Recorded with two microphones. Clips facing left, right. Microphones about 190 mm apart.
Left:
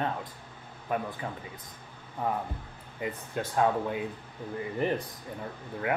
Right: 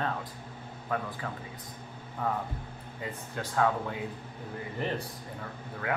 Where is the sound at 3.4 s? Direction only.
15° left (ahead or behind).